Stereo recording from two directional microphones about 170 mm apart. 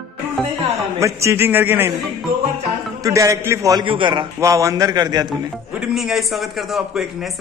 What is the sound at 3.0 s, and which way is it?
Speech, 20° right (ahead or behind).